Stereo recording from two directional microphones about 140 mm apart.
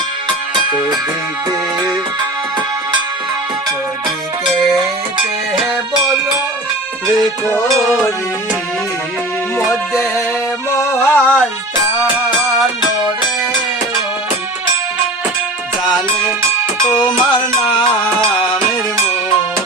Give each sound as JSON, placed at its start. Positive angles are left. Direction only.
{"t": 9.6, "sound": "music", "side_deg": 0}
{"t": 10.8, "sound": "music", "side_deg": 15}
{"t": 16.9, "sound": "music", "side_deg": 30}